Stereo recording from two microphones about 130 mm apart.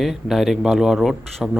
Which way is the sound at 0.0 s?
Centre (ahead or behind).